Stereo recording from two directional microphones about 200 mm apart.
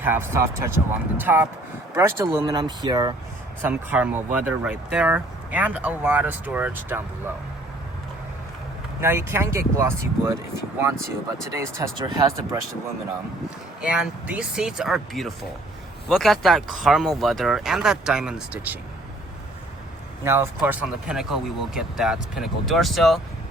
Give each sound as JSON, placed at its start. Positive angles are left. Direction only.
{"t": 0.0, "sound": "speech", "side_deg": -10}
{"t": 3.6, "sound": "speech", "side_deg": -10}
{"t": 9.0, "sound": "speech", "side_deg": -10}
{"t": 11.5, "sound": "speech", "side_deg": -15}
{"t": 13.8, "sound": "speech", "side_deg": -5}
{"t": 20.2, "sound": "speech", "side_deg": -15}